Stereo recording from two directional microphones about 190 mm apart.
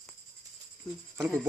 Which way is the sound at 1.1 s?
5° left (ahead or behind).